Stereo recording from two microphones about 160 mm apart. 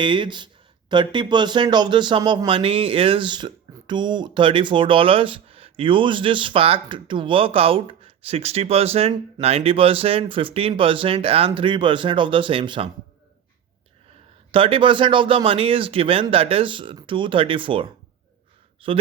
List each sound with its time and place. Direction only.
0.0 s speech: 30° right (ahead or behind)
14.5 s speech: 35° right (ahead or behind)